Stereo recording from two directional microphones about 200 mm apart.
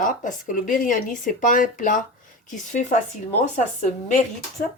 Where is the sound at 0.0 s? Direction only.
40° left (ahead or behind).